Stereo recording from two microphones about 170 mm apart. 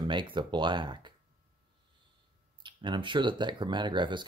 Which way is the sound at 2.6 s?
30° right (ahead or behind).